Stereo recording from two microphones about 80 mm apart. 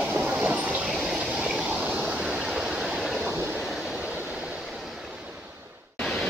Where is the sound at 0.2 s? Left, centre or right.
Centre.